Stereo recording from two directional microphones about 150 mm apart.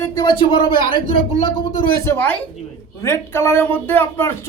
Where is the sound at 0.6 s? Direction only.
65° right (ahead or behind).